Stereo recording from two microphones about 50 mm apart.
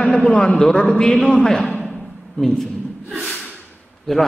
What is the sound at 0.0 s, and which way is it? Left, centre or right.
A man's voice, left.